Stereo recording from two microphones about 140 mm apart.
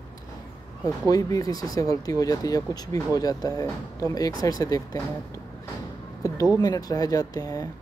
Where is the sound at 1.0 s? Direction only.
25° left (ahead or behind).